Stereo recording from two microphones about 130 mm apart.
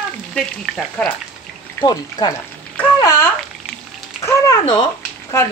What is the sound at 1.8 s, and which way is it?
Speech, 30° left (ahead or behind).